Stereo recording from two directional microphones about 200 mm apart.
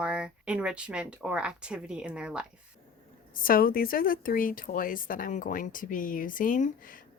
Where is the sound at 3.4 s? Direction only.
45° left (ahead or behind).